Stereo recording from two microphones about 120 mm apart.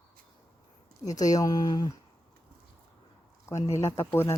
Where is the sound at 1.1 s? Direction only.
30° left (ahead or behind).